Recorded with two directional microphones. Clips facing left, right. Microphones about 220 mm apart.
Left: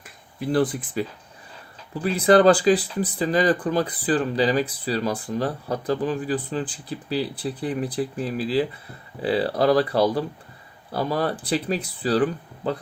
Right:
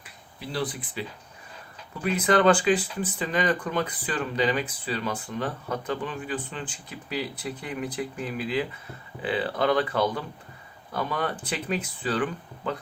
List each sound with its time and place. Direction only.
0.0 s speech: 50° left (ahead or behind)
2.0 s speech: 35° left (ahead or behind)